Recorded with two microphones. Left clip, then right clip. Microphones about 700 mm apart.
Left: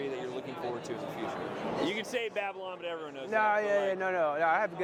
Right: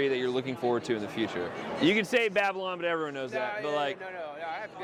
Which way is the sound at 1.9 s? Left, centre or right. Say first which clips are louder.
Right 8 dB; right.